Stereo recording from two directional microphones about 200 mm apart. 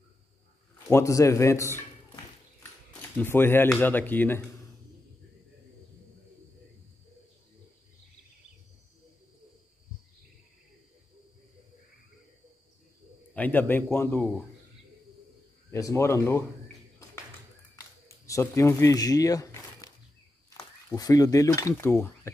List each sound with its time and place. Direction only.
0.8 s speech: 15° left (ahead or behind)
3.2 s speech: 10° left (ahead or behind)
13.3 s speech: 10° left (ahead or behind)
15.7 s speech: 15° left (ahead or behind)
17.7 s a sound: 15° left (ahead or behind)
20.4 s speech: 20° left (ahead or behind)